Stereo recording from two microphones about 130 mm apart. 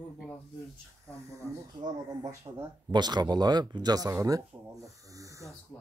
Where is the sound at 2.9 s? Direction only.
35° right (ahead or behind).